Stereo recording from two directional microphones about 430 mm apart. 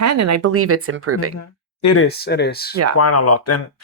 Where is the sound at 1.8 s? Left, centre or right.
Left.